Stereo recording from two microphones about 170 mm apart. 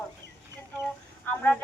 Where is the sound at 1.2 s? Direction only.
10° left (ahead or behind).